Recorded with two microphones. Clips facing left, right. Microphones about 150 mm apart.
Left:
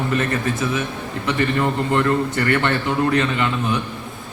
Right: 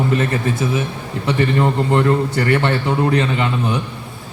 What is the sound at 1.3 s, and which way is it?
A man's voice, 30° right (ahead or behind).